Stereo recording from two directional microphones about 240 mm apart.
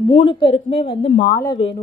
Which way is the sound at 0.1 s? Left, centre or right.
Left.